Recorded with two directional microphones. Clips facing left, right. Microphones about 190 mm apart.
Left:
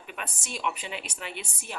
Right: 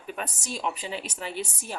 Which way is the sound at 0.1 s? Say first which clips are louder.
Right 4 dB; 40° right (ahead or behind).